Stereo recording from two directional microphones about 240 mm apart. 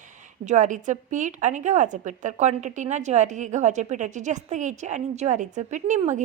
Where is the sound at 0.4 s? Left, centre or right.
Right.